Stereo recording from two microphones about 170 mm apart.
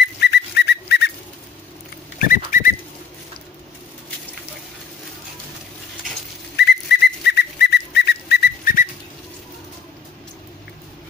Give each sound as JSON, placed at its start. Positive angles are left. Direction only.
{"t": 0.0, "sound": "whistle", "side_deg": 80}
{"t": 2.1, "sound": "bird", "side_deg": 55}
{"t": 6.5, "sound": "whistle", "side_deg": 80}